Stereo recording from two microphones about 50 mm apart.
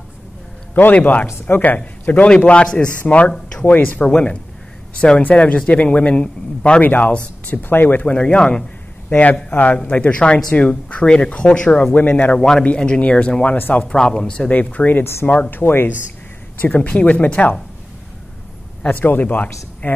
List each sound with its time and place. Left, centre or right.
0.7 s speech: left
2.1 s speech: left
4.0 s speech: left
6.8 s speech: left
8.1 s speech: left
9.1 s speech: left
11.8 s speech: left
12.4 s speech: centre
13.6 s speech: left
13.8 s speech: centre
14.5 s speech: left
15.5 s speech: left
16.6 s speech: left
18.9 s speech: left